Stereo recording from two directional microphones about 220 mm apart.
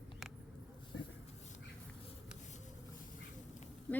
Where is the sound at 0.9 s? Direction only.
60° left (ahead or behind).